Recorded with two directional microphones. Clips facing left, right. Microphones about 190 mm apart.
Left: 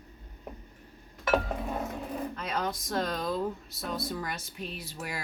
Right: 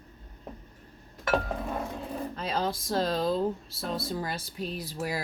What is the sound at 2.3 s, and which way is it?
Speech, 30° right (ahead or behind).